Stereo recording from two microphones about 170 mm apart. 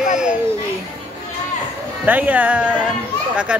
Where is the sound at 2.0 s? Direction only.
10° right (ahead or behind).